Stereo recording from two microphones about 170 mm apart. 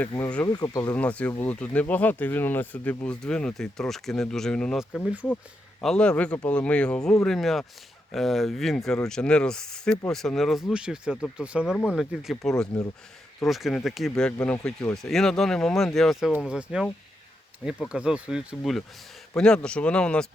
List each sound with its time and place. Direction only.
0.1 s speech: 25° left (ahead or behind)
0.9 s speech: 10° left (ahead or behind)
11.6 s speech: 10° left (ahead or behind)
11.9 s speech: centre (ahead or behind)
17.8 s a man's voice: 5° right (ahead or behind)